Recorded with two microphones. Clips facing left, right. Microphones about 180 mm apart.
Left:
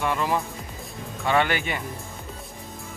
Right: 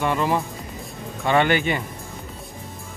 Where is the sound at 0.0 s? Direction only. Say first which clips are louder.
Right 3 dB; centre (ahead or behind).